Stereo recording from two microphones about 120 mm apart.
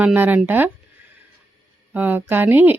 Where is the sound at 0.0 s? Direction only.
15° right (ahead or behind).